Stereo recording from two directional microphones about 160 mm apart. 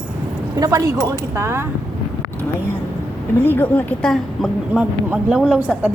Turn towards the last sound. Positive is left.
turn(degrees=-5)  # may be behind; listen again after turning